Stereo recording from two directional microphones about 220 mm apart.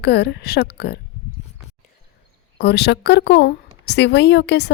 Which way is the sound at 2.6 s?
50° left (ahead or behind).